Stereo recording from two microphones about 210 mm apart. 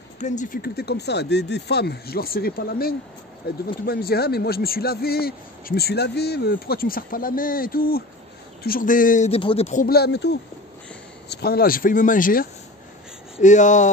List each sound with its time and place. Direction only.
0.2 s a man's voice: 35° left (ahead or behind)
9.8 s a man's voice: 50° left (ahead or behind)